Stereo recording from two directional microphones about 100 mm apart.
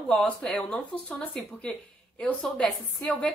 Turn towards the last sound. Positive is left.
turn(degrees=10)  # may be behind; listen again after turning